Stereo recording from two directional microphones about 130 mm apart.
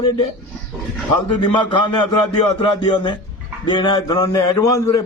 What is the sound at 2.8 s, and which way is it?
A man's voice, 35° left (ahead or behind).